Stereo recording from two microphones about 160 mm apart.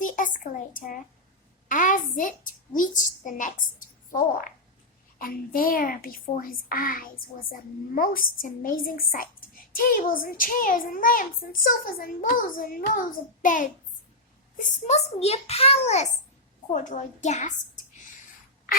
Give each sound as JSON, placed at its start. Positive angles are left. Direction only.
{"t": 0.0, "sound": "a sound", "side_deg": 55}
{"t": 1.6, "sound": "a woman's voice", "side_deg": 55}
{"t": 16.7, "sound": "a woman's voice", "side_deg": 50}